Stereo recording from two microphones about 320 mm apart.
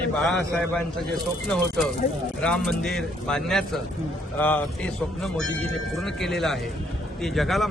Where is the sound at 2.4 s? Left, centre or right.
Centre.